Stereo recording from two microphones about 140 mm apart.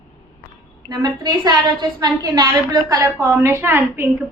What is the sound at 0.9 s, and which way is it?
A woman's voice, 30° right (ahead or behind).